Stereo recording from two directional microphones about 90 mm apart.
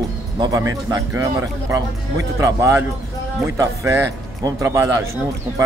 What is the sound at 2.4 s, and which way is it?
A man's voice, 35° right (ahead or behind).